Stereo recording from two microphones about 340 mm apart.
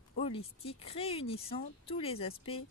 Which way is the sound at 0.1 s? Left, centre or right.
Centre.